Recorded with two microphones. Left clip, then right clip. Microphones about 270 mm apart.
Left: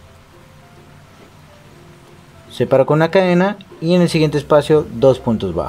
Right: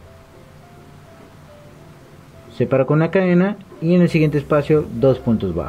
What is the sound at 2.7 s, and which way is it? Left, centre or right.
Speech, left.